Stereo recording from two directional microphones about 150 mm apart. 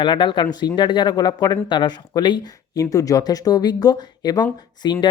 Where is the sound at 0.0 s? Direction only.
30° left (ahead or behind).